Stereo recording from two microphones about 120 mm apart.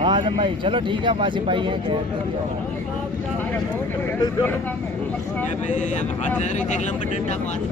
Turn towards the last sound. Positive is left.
turn(degrees=90)